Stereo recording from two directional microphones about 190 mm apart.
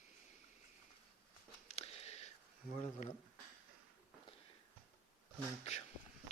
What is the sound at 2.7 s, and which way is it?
Speech, 35° left (ahead or behind).